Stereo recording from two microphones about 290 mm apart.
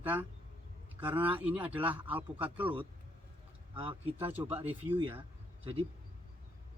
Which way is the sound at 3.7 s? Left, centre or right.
Centre.